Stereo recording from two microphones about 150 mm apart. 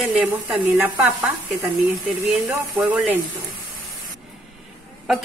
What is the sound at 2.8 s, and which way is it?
Sizzle, 5° right (ahead or behind).